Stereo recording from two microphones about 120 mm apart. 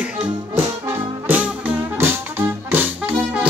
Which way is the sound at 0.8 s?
15° right (ahead or behind).